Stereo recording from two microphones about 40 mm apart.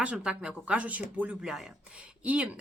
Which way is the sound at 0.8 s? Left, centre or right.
Right.